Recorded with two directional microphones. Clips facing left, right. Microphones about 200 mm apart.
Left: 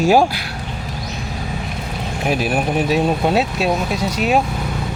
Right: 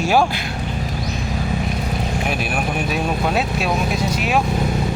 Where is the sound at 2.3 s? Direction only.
35° left (ahead or behind).